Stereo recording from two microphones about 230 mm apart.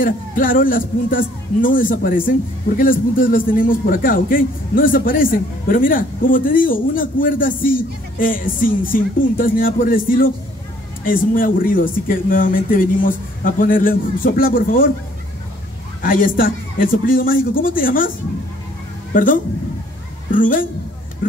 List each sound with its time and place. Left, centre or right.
0.0 s a man's voice: left
16.0 s a man's voice: left
19.1 s a man's voice: left
21.2 s vehicle: left